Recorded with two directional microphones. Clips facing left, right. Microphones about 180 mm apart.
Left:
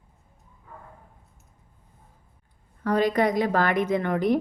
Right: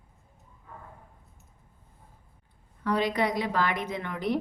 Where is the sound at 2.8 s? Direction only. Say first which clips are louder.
Left 5 dB; 45° left (ahead or behind).